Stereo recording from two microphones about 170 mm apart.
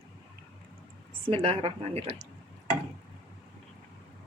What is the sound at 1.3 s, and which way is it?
Speech, 35° right (ahead or behind).